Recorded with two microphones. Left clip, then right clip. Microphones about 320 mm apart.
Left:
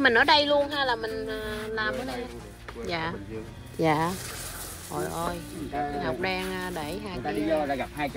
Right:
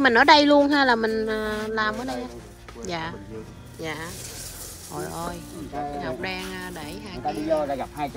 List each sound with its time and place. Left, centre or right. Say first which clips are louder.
0.0 s speech: right 5 dB; centre
3.8 s speech: left 8 dB; centre
4.9 s speech: left 1 dB; centre